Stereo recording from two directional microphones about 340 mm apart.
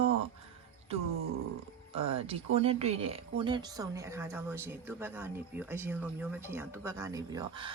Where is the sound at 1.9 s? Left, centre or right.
Centre.